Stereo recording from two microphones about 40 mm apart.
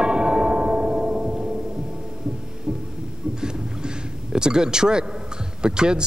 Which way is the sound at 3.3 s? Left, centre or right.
Centre.